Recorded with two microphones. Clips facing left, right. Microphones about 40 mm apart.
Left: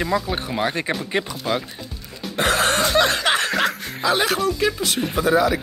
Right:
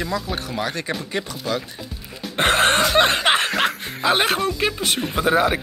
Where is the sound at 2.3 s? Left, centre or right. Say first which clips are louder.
Right 2 dB; right.